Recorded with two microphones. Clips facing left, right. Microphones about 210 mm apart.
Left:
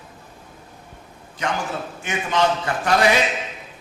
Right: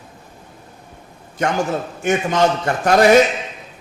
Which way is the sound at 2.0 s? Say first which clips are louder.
Right 6 dB; 45° right (ahead or behind).